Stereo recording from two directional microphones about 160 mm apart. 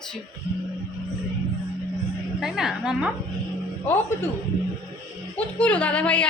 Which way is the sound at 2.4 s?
5° right (ahead or behind).